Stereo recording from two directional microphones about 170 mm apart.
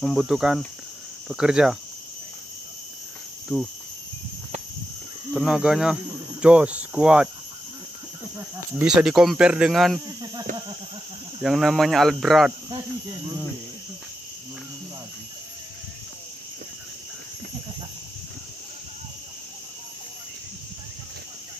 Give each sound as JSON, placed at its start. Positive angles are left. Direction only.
{"t": 0.0, "sound": "speech", "side_deg": 0}
{"t": 3.5, "sound": "speech", "side_deg": 0}
{"t": 5.3, "sound": "speech", "side_deg": -5}
{"t": 6.4, "sound": "cricket", "side_deg": -5}
{"t": 8.4, "sound": "speech", "side_deg": -5}
{"t": 10.0, "sound": "speech", "side_deg": -25}
{"t": 11.4, "sound": "speech", "side_deg": 0}
{"t": 12.6, "sound": "speech", "side_deg": -25}